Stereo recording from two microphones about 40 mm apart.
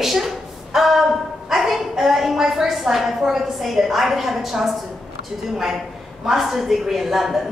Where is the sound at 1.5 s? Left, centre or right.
Centre.